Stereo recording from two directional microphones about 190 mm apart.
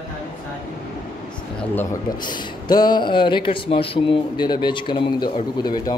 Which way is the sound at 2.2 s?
25° left (ahead or behind).